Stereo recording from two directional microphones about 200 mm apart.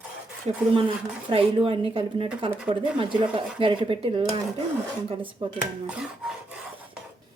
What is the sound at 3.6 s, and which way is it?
Speech, 25° right (ahead or behind).